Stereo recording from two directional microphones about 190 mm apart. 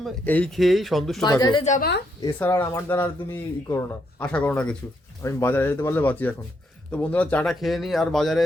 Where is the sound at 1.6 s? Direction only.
40° left (ahead or behind).